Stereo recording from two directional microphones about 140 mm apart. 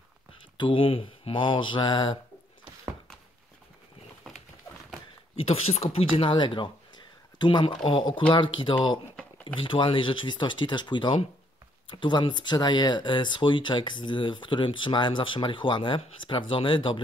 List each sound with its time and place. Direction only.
0.6 s speech: 40° left (ahead or behind)
4.2 s a sound: centre (ahead or behind)
5.3 s speech: 45° left (ahead or behind)